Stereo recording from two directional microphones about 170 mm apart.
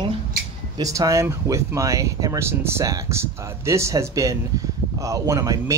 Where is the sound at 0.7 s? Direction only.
20° right (ahead or behind).